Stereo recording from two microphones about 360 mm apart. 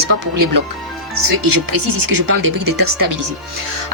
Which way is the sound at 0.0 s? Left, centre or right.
Right.